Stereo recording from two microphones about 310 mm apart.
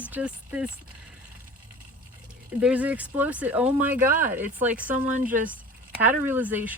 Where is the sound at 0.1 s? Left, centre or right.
Centre.